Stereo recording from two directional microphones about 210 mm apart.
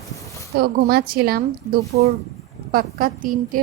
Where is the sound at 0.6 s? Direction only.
45° right (ahead or behind).